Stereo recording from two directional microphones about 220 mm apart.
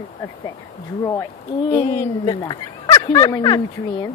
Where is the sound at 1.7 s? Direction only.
15° left (ahead or behind).